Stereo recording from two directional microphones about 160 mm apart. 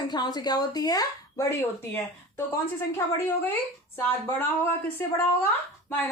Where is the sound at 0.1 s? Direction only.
25° left (ahead or behind).